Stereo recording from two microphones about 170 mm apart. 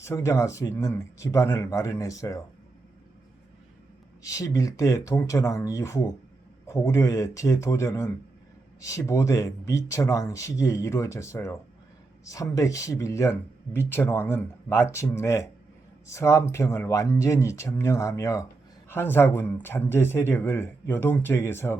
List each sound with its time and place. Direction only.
0.0 s speech: 15° left (ahead or behind)
4.2 s speech: 20° left (ahead or behind)